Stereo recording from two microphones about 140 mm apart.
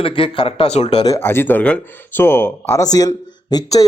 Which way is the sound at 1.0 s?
20° left (ahead or behind).